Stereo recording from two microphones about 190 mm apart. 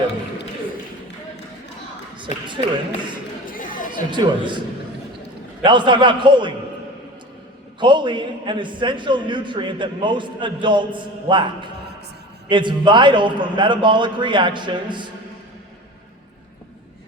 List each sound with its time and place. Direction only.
2.1 s a sound: 25° right (ahead or behind)
3.5 s chatter: 45° left (ahead or behind)
4.1 s a man's voice: 25° right (ahead or behind)
5.6 s a man's voice: 25° right (ahead or behind)
7.8 s a man's voice: 25° right (ahead or behind)